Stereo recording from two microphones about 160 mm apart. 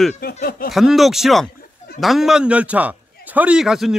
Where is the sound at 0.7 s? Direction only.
Centre (ahead or behind).